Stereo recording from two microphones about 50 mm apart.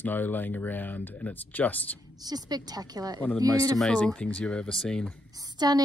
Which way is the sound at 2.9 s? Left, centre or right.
Right.